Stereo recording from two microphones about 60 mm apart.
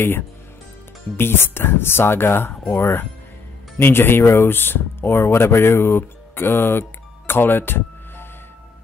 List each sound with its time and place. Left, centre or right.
1.1 s speech: left